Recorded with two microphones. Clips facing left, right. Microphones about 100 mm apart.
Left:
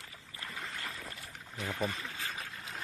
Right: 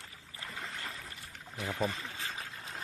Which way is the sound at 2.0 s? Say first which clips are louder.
Even; 20° right (ahead or behind).